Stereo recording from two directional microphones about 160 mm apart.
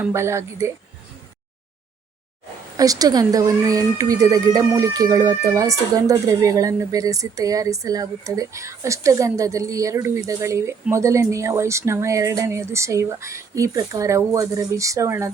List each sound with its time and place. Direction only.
0.0 s speech: 15° right (ahead or behind)
2.7 s speech: 20° right (ahead or behind)